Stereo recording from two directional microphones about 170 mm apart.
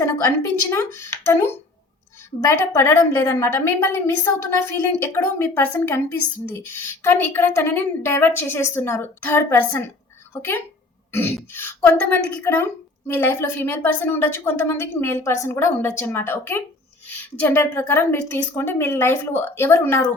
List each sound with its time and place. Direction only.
0.7 s a woman's voice: 15° left (ahead or behind)
11.1 s throat clearing: 10° left (ahead or behind)
11.5 s a woman's voice: 10° left (ahead or behind)